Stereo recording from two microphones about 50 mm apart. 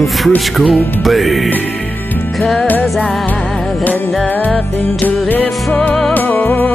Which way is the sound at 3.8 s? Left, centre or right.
Left.